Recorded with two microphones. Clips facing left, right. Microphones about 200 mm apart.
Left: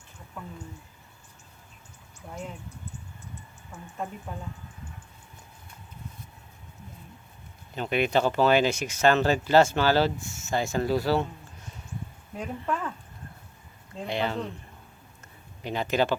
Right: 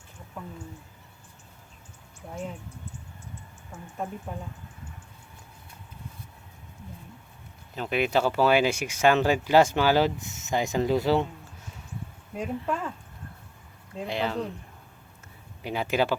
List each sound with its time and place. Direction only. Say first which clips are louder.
7.8 s speech: even; centre (ahead or behind); by 11.3 s 20° right (ahead or behind)
12.4 s speech: right 1 dB; 5° right (ahead or behind)
13.9 s speech: even; centre (ahead or behind)
15.6 s speech: even; 10° right (ahead or behind)